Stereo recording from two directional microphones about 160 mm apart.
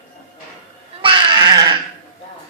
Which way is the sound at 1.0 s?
30° right (ahead or behind).